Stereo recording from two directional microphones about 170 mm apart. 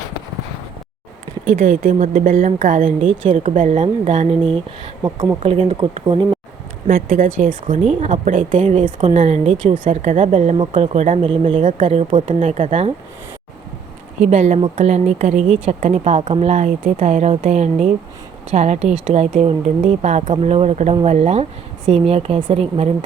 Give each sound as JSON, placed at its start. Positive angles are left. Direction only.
{"t": 1.5, "sound": "speech", "side_deg": -50}
{"t": 5.0, "sound": "speech", "side_deg": -20}
{"t": 5.4, "sound": "speech", "side_deg": -35}
{"t": 6.8, "sound": "speech", "side_deg": -50}
{"t": 11.3, "sound": "speech", "side_deg": -30}
{"t": 14.2, "sound": "speech", "side_deg": -40}